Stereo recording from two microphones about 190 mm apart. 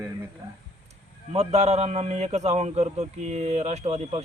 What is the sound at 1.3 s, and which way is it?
A man's voice, 35° right (ahead or behind).